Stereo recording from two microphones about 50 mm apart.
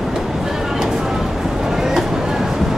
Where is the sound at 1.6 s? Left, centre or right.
Centre.